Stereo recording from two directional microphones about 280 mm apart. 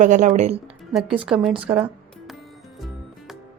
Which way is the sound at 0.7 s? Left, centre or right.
Centre.